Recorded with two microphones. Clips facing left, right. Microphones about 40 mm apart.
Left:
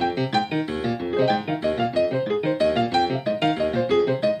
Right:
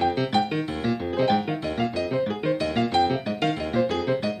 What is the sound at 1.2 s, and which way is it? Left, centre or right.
Music, centre.